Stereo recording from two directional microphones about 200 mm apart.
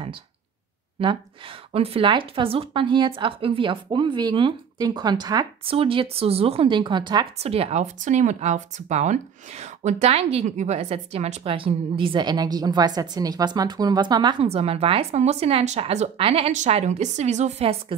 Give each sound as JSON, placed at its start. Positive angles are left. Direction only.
{"t": 1.7, "sound": "speech", "side_deg": -25}